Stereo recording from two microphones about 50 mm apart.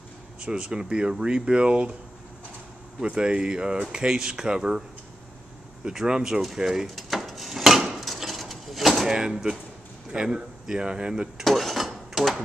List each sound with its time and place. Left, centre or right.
0.4 s speech: centre
3.0 s speech: centre
5.9 s speech: centre
7.0 s a sound: centre
10.1 s speech: centre
11.4 s dishes: centre